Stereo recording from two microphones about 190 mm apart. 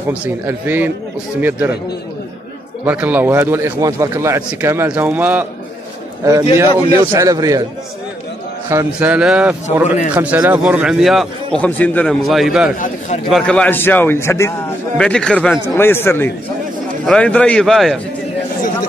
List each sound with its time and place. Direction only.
0.1 s a man's voice: 10° right (ahead or behind)
2.8 s a man's voice: 10° right (ahead or behind)
6.9 s a man's voice: 15° right (ahead or behind)
8.6 s a man's voice: 10° right (ahead or behind)
12.7 s a man's voice: 45° left (ahead or behind)
13.3 s a man's voice: 5° left (ahead or behind)